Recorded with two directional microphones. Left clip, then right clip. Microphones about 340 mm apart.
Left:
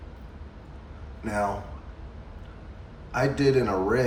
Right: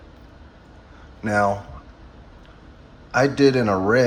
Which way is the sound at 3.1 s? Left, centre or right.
Centre.